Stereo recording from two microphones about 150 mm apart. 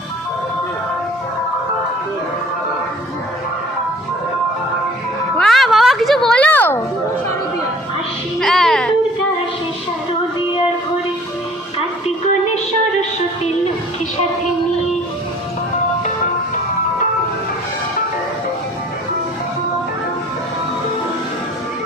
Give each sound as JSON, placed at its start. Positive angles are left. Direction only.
{"t": 5.4, "sound": "music", "side_deg": 0}
{"t": 8.4, "sound": "music", "side_deg": 0}
{"t": 12.0, "sound": "a sound", "side_deg": 45}